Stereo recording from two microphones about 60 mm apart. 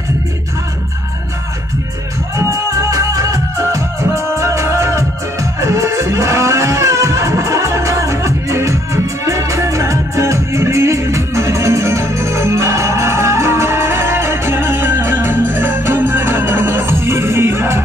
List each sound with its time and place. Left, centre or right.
2.3 s music: right
4.1 s music: right